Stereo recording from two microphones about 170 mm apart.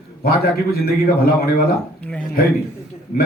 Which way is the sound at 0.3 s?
65° left (ahead or behind).